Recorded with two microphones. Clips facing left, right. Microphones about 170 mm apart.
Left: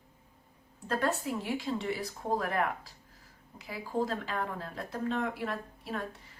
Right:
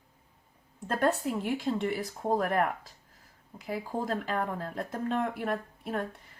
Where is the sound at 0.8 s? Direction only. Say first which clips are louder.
Right 3 dB; 55° right (ahead or behind).